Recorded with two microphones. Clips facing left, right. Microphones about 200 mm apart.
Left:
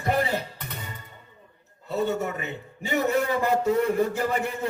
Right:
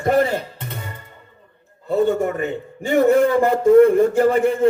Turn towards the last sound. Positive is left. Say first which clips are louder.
# right 11 dB
turn(degrees=-50)  # may be behind; listen again after turning